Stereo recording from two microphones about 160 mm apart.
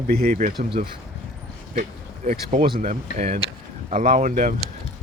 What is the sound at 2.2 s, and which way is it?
Speech, 50° right (ahead or behind).